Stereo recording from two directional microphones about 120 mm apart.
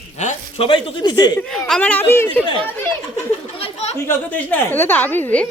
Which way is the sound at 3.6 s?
60° left (ahead or behind).